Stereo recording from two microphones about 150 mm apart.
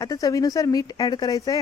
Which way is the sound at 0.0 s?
20° left (ahead or behind).